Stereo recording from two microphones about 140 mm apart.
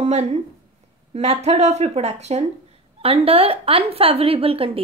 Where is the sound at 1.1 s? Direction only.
50° right (ahead or behind).